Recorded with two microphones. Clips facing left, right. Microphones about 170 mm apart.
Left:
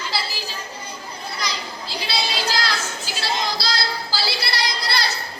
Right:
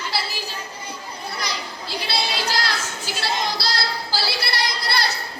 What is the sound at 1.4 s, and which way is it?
Children playing, 60° right (ahead or behind).